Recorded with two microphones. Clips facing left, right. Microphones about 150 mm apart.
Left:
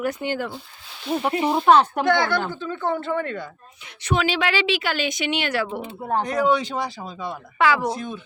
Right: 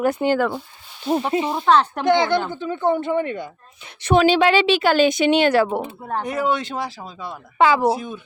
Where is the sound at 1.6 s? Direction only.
15° left (ahead or behind).